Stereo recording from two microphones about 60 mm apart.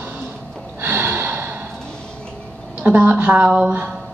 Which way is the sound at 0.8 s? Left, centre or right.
Right.